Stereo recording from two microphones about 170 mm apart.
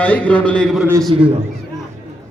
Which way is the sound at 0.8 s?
15° right (ahead or behind).